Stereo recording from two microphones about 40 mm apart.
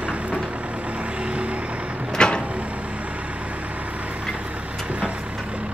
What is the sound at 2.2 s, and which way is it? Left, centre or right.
Vehicle, left.